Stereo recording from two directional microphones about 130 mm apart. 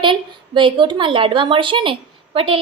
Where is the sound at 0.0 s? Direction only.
40° right (ahead or behind).